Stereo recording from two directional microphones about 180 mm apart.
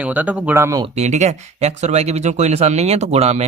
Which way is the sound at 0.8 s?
40° right (ahead or behind).